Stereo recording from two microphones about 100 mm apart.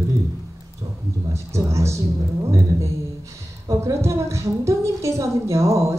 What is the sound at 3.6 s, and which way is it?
A woman's voice, 30° right (ahead or behind).